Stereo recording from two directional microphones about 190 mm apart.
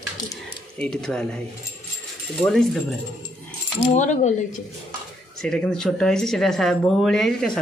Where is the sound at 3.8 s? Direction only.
35° left (ahead or behind).